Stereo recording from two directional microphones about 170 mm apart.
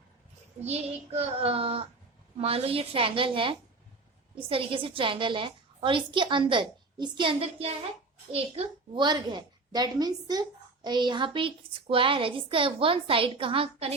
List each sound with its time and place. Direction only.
0.6 s a woman's voice: 40° right (ahead or behind)